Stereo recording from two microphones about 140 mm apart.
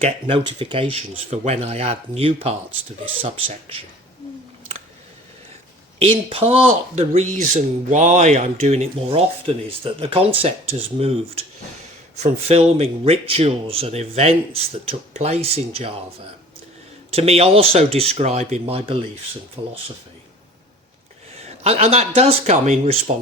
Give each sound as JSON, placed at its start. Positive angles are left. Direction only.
{"t": 0.0, "sound": "speech", "side_deg": -40}
{"t": 6.0, "sound": "speech", "side_deg": -45}
{"t": 7.5, "sound": "speech", "side_deg": -60}
{"t": 17.1, "sound": "speech", "side_deg": -45}
{"t": 21.4, "sound": "speech", "side_deg": -50}